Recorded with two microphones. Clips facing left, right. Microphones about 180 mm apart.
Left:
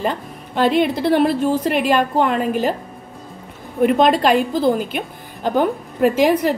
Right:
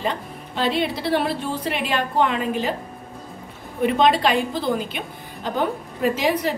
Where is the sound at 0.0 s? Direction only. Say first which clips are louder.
Left 4 dB; 50° left (ahead or behind).